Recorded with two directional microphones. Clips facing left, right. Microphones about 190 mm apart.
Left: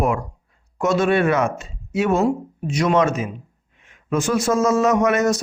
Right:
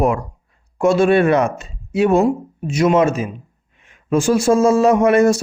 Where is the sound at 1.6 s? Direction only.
35° right (ahead or behind).